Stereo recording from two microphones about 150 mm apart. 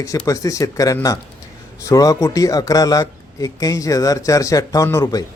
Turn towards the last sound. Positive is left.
turn(degrees=20)  # may be behind; listen again after turning